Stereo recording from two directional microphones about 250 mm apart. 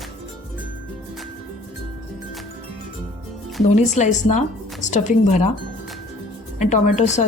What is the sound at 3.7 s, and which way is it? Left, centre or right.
A woman's voice, left.